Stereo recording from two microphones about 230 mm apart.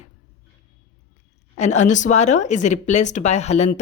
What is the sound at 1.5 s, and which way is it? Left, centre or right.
Speech, left.